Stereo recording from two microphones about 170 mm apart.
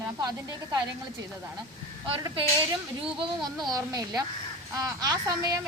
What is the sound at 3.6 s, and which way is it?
A woman's voice, 20° right (ahead or behind).